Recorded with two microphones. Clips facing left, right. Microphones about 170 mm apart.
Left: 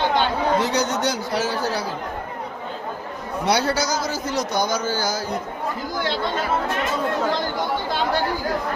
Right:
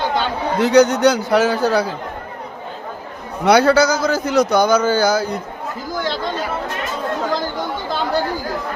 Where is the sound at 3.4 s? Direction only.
60° right (ahead or behind).